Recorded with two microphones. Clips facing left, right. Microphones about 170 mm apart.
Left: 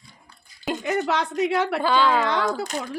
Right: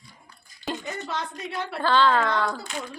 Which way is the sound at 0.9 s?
80° left.